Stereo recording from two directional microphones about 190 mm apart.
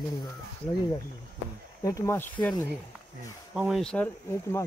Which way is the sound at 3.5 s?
5° right (ahead or behind).